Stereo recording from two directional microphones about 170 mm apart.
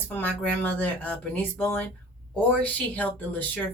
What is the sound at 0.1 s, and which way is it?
A woman's voice, 10° left (ahead or behind).